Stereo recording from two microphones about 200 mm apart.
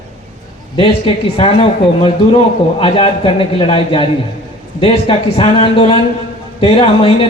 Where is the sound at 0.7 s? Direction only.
25° left (ahead or behind).